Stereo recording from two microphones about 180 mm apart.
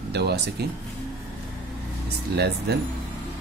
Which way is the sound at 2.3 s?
65° right (ahead or behind).